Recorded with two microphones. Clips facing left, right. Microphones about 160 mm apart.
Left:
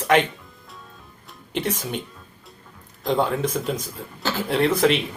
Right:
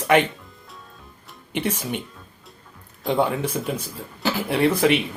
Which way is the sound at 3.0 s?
5° right (ahead or behind).